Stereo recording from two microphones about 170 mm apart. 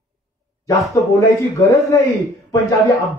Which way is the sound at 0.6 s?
20° left (ahead or behind).